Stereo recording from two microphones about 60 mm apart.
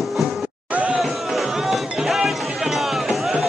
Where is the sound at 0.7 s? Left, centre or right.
Right.